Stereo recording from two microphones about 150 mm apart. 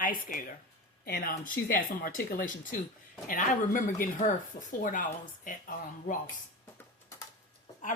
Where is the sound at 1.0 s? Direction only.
80° left; by 6.1 s 65° left (ahead or behind).